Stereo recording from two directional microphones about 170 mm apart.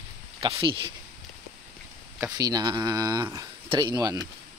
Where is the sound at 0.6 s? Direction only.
30° right (ahead or behind).